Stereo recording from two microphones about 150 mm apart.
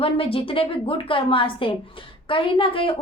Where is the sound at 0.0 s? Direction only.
40° left (ahead or behind).